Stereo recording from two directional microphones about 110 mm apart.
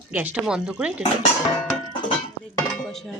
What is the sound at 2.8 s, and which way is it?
Speech, centre (ahead or behind).